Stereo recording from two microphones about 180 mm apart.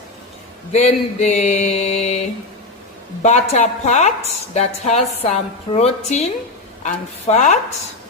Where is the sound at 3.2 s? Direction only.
40° left (ahead or behind).